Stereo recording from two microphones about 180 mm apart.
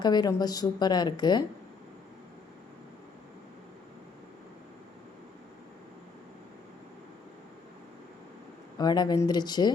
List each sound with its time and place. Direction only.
0.0 s a woman's voice: 25° left (ahead or behind)
8.8 s a woman's voice: 25° left (ahead or behind)